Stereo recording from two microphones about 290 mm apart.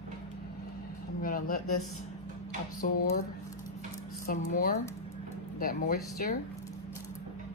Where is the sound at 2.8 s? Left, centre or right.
Left.